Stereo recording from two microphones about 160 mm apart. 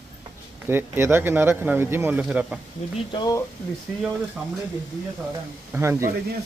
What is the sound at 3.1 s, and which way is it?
Speech, 25° left (ahead or behind).